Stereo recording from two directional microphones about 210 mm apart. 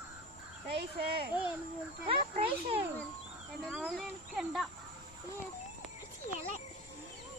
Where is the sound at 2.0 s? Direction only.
25° right (ahead or behind).